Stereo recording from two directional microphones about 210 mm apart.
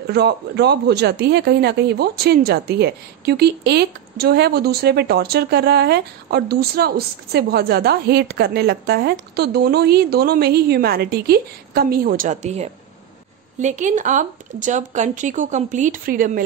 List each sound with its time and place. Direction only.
0.0 s speech: 50° right (ahead or behind)